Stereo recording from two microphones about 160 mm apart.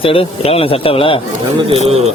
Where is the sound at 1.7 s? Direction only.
40° right (ahead or behind).